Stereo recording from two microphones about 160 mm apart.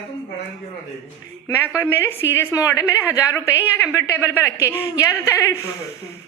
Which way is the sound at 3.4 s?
10° right (ahead or behind).